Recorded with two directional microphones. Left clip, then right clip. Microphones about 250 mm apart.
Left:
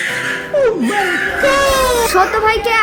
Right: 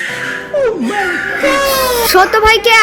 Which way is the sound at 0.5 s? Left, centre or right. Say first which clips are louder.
Even; centre.